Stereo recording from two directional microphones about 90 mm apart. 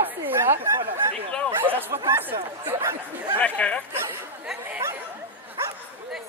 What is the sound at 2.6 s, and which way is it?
Speech, 25° right (ahead or behind).